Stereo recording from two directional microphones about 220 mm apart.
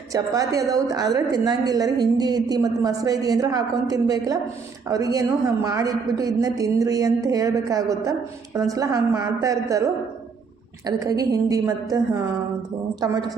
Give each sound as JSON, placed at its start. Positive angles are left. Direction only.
{"t": 0.1, "sound": "a woman's voice", "side_deg": -15}